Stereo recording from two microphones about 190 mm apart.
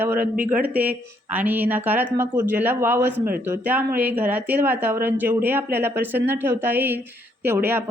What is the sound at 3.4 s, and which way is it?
Speech, 10° right (ahead or behind).